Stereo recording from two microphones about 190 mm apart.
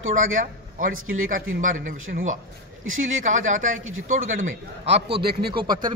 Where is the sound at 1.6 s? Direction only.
45° right (ahead or behind).